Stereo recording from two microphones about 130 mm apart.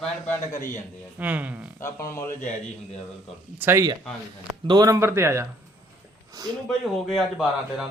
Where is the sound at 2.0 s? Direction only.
20° left (ahead or behind).